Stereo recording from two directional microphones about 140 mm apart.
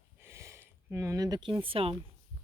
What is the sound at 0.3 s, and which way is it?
Speech, 20° right (ahead or behind).